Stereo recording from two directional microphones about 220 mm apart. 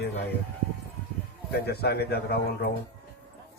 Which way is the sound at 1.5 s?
45° left (ahead or behind).